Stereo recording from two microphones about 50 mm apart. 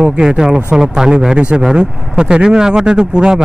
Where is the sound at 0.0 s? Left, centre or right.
Centre.